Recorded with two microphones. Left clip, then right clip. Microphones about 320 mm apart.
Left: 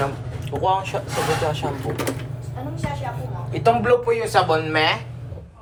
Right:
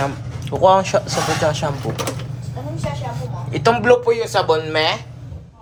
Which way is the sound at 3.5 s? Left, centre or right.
Right.